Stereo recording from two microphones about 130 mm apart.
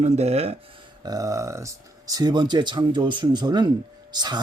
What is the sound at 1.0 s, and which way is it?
Speech, 25° right (ahead or behind).